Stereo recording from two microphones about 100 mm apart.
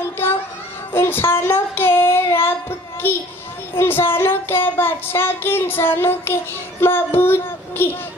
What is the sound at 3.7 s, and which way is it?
Child singing, 25° left (ahead or behind).